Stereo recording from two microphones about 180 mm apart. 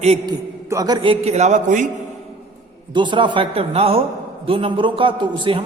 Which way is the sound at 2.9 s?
25° right (ahead or behind).